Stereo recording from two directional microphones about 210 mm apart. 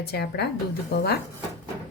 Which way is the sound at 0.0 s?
50° left (ahead or behind).